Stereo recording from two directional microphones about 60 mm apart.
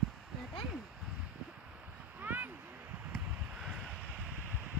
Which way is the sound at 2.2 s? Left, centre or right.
Right.